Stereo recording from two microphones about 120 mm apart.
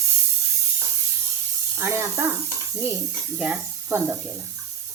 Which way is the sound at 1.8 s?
25° right (ahead or behind).